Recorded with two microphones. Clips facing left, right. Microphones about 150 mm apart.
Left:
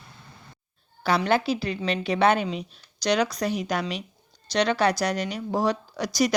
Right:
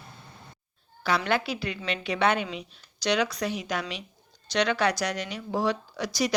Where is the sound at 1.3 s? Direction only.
35° left (ahead or behind).